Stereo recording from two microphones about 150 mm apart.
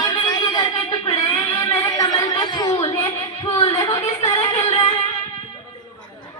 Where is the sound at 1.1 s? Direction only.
30° left (ahead or behind).